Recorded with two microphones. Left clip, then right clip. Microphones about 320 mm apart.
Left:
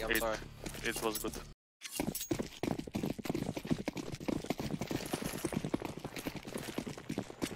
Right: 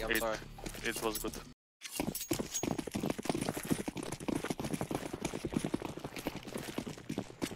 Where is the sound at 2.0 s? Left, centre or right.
Centre.